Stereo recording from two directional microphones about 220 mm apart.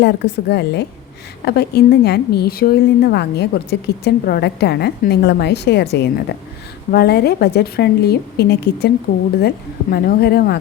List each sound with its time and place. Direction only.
0.0 s a woman's voice: 50° left (ahead or behind)
9.9 s a woman's voice: 45° left (ahead or behind)